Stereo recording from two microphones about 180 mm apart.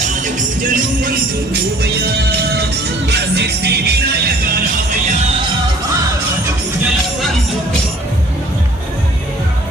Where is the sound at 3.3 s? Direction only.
65° right (ahead or behind).